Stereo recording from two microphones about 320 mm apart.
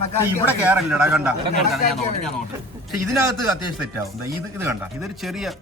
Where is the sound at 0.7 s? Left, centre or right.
Centre.